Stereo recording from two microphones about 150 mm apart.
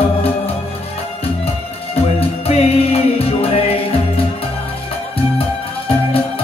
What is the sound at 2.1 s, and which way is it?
Music, 45° left (ahead or behind).